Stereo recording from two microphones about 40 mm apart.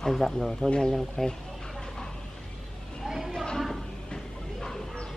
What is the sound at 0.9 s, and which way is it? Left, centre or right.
Speech, centre.